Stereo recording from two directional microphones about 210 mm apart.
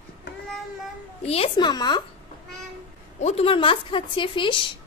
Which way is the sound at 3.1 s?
30° left (ahead or behind).